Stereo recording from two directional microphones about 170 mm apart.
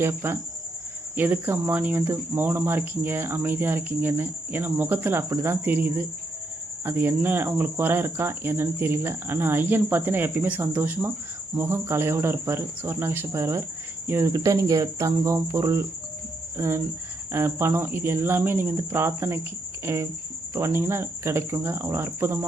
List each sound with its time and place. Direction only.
0.0 s cricket: 15° right (ahead or behind)